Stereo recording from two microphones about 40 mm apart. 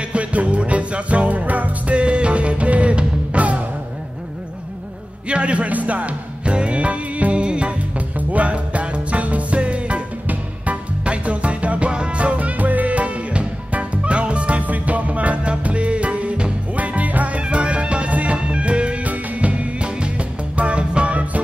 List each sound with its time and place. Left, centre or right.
0.1 s music: right
5.3 s music: right
16.7 s music: right
17.4 s music: right